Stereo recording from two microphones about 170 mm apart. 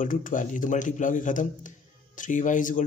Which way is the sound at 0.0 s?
50° left (ahead or behind).